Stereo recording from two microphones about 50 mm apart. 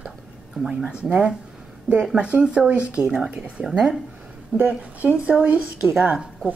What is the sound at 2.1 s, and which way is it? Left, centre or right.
Speech, right.